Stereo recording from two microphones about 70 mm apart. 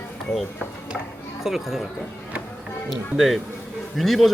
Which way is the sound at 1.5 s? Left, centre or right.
Centre.